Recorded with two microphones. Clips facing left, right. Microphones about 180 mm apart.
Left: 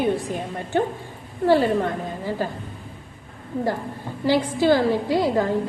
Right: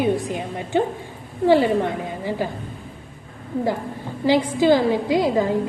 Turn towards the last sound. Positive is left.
turn(degrees=-15)  # may be behind; listen again after turning